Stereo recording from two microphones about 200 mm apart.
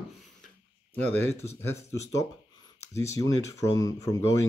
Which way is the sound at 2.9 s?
15° left (ahead or behind).